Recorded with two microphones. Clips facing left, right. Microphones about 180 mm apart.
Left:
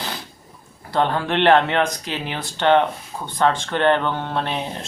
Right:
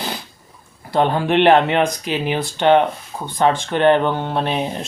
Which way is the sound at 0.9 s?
15° right (ahead or behind).